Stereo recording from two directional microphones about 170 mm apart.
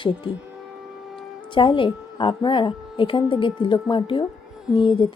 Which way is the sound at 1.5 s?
30° left (ahead or behind).